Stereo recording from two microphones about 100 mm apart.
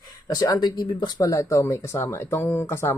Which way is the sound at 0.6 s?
50° left (ahead or behind).